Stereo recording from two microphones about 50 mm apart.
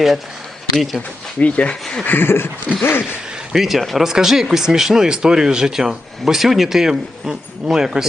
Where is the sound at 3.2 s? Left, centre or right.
Centre.